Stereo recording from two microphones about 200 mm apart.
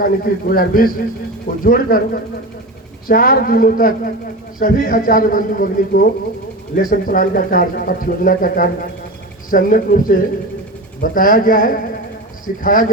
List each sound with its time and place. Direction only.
0.0 s speech: 45° left (ahead or behind)